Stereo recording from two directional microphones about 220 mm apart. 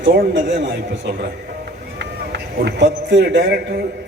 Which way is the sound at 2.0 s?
50° right (ahead or behind).